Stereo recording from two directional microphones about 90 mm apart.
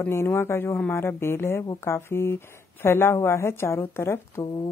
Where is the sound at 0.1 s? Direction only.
30° left (ahead or behind).